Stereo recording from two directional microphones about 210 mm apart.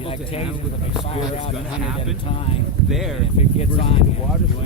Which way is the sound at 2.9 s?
Centre (ahead or behind).